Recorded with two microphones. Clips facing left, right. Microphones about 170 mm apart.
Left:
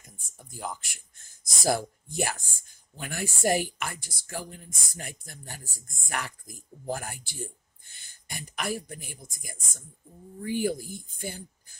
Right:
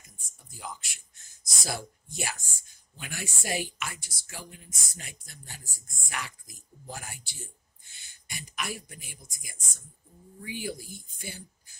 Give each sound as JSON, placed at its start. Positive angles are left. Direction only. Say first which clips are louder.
{"t": 0.5, "sound": "speech", "louder": "left 5 dB", "side_deg": 50}